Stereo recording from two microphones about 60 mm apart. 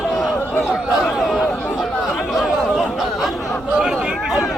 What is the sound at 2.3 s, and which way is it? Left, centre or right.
Chatter, centre.